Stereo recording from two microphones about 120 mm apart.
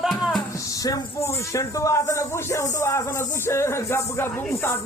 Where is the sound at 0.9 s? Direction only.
25° left (ahead or behind).